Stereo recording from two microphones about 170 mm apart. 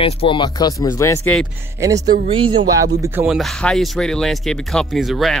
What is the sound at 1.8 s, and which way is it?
Speech, 20° right (ahead or behind).